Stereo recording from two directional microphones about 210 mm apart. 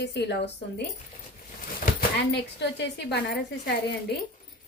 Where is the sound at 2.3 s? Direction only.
55° left (ahead or behind).